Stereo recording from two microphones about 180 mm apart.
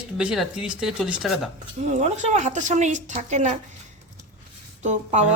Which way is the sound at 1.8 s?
40° right (ahead or behind).